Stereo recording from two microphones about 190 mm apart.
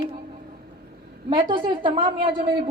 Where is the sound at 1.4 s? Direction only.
25° right (ahead or behind).